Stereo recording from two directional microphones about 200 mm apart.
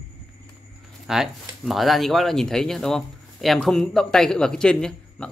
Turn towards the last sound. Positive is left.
turn(degrees=5)  # may be behind; listen again after turning